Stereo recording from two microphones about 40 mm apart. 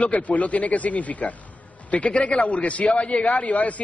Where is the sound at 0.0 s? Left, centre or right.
Left.